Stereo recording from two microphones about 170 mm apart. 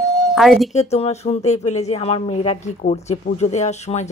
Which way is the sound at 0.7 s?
40° left (ahead or behind).